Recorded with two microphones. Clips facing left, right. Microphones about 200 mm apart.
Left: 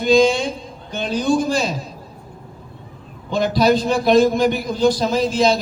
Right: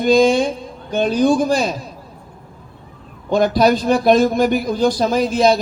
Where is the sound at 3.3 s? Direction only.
50° right (ahead or behind).